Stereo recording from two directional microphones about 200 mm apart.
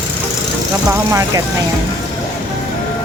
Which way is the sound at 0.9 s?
15° right (ahead or behind).